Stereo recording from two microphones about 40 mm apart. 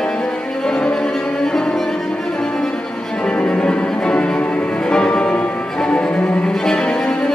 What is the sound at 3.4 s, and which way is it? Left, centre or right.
Music, left.